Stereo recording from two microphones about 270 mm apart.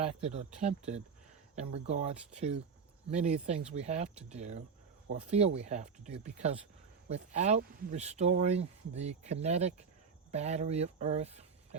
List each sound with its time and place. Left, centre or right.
0.0 s speech: right
1.9 s speech: right